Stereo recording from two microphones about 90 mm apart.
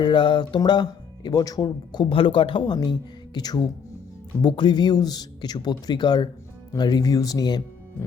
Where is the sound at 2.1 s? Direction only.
80° left.